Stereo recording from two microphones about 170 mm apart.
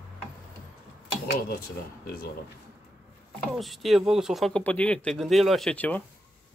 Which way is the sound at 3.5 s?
Centre (ahead or behind).